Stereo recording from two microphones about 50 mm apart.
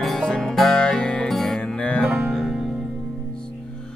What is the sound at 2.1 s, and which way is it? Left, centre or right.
Music, right.